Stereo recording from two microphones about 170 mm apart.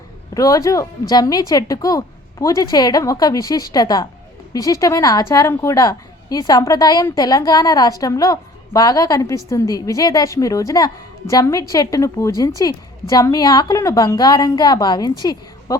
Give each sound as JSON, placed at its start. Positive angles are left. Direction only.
{"t": 0.3, "sound": "a woman's voice", "side_deg": 20}